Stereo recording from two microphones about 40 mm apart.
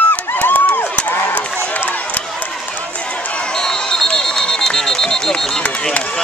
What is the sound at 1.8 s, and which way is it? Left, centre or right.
Run, left.